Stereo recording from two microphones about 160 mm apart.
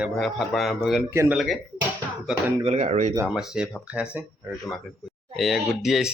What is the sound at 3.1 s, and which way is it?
Speech, 5° right (ahead or behind).